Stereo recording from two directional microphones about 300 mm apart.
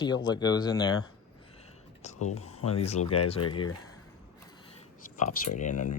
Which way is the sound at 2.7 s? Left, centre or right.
Centre.